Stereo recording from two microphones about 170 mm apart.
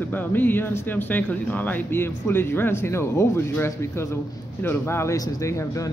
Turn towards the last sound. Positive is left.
turn(degrees=20)  # may be behind; listen again after turning